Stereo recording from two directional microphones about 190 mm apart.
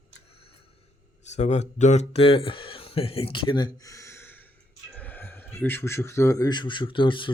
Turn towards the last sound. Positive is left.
turn(degrees=25)  # may be behind; listen again after turning